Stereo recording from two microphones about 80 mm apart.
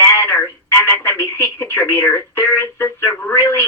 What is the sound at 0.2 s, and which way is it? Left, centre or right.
Speech, left.